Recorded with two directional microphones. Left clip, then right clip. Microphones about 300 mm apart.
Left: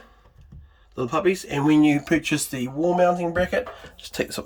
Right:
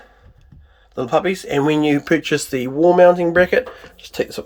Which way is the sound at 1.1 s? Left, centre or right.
Centre.